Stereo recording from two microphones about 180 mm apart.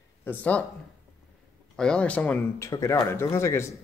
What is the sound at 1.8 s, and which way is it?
Speech, 5° left (ahead or behind).